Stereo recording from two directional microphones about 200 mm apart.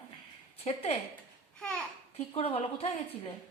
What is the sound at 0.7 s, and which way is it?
Speech, 30° left (ahead or behind).